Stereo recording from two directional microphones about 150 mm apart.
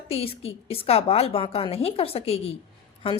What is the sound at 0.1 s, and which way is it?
Speech, 40° left (ahead or behind).